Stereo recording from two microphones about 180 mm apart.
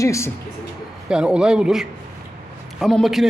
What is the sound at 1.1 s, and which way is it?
Speech, 5° right (ahead or behind).